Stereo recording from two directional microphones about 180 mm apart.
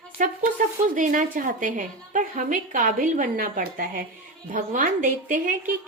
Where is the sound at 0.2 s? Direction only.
45° right (ahead or behind).